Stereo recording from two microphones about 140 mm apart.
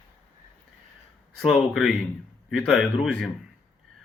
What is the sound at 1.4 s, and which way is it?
Speech, centre (ahead or behind).